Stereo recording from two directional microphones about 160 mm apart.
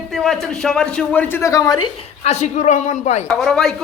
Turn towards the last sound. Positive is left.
turn(degrees=0)  # may be behind; listen again after turning